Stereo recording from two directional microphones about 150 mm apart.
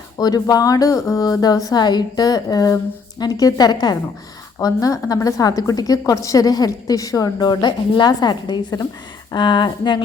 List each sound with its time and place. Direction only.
0.2 s a woman's voice: 25° left (ahead or behind)